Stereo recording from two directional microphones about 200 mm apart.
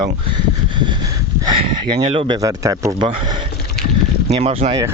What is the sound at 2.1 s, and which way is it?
Speech, 20° right (ahead or behind).